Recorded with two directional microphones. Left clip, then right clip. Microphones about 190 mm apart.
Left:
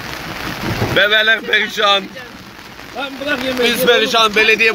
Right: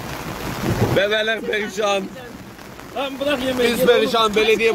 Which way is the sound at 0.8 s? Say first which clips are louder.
Left 6 dB; 10° right (ahead or behind).